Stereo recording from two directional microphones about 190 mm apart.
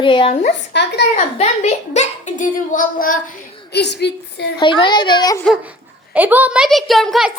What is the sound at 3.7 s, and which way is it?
Speech, 60° left (ahead or behind).